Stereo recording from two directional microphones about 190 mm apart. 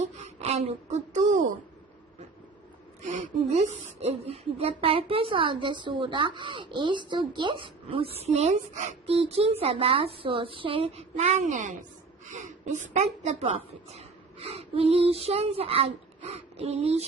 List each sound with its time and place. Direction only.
0.0 s a woman's voice: 35° right (ahead or behind)
3.2 s a woman's voice: 35° right (ahead or behind)